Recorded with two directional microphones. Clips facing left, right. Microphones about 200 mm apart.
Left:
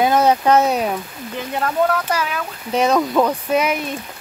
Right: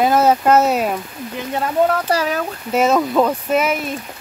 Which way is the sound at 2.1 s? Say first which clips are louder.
Right 4 dB; 40° right (ahead or behind).